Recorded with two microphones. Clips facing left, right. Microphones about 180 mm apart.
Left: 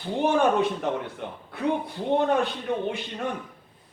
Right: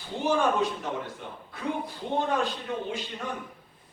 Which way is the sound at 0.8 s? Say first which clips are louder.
Left 5 dB; 60° left (ahead or behind).